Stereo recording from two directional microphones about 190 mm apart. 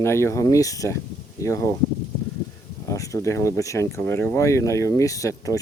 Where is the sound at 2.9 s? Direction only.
15° left (ahead or behind).